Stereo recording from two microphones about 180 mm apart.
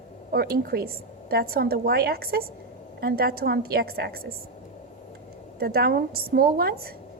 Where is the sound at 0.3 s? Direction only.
55° right (ahead or behind).